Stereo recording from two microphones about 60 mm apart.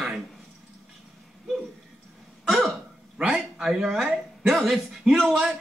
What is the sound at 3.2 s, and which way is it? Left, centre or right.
Speech, centre.